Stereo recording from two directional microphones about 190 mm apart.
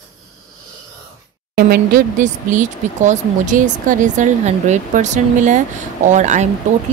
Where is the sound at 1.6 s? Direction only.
50° right (ahead or behind).